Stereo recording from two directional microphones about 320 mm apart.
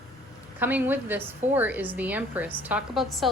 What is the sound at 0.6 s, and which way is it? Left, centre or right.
A woman's voice, centre.